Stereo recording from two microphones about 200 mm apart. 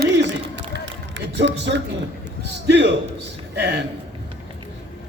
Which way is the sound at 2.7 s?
60° right (ahead or behind).